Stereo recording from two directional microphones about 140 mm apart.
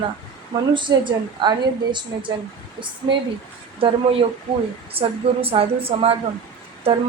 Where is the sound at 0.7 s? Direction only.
35° right (ahead or behind).